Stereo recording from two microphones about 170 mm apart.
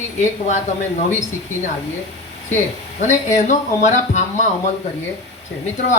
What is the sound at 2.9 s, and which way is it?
Speech, 45° left (ahead or behind).